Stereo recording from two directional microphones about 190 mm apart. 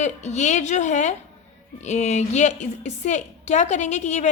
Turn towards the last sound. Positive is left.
turn(degrees=35)  # may be behind; listen again after turning